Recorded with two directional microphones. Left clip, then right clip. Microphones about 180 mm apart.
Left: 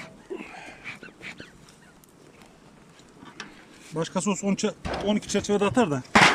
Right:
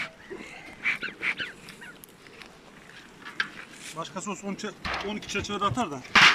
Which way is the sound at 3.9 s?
65° left (ahead or behind).